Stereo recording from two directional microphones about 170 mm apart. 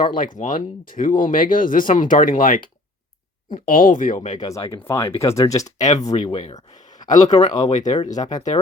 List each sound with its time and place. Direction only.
0.0 s speech: 50° left (ahead or behind)
3.7 s speech: 55° left (ahead or behind)
4.4 s speech: 20° left (ahead or behind)
5.6 s speech: 45° left (ahead or behind)
6.0 s speech: 25° left (ahead or behind)
6.7 s a sound: 45° left (ahead or behind)
7.3 s speech: 25° left (ahead or behind)
7.7 s speech: 45° left (ahead or behind)
8.1 s speech: 20° left (ahead or behind)